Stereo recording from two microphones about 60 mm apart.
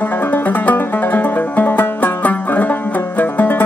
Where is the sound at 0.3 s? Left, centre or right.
Left.